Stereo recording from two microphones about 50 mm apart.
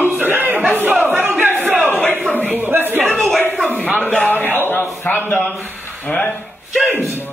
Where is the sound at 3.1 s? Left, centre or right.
Centre.